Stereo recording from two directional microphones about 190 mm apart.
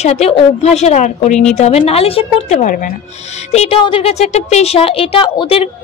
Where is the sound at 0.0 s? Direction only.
35° left (ahead or behind).